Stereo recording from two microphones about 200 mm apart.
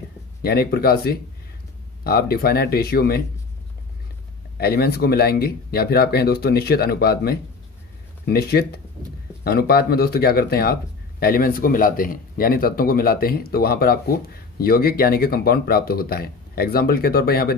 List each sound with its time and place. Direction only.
0.4 s speech: 50° left (ahead or behind)
4.6 s speech: 50° left (ahead or behind)